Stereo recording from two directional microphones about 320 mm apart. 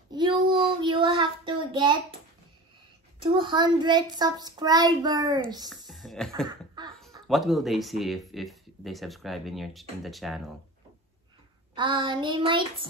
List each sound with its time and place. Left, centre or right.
0.1 s child singing: centre
3.2 s a child's voice: centre
5.9 s music: centre
6.4 s a sound: centre
7.2 s speech: centre
11.7 s a child's voice: centre